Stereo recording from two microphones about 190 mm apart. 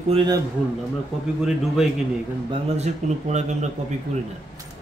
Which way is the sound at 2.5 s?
35° right (ahead or behind).